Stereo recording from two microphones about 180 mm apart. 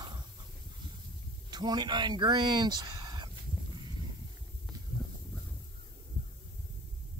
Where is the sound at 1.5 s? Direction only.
25° right (ahead or behind).